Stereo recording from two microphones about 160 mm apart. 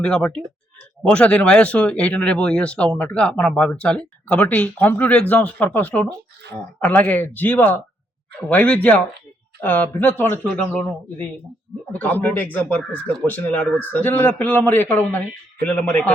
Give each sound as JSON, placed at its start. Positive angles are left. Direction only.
{"t": 0.0, "sound": "speech", "side_deg": 5}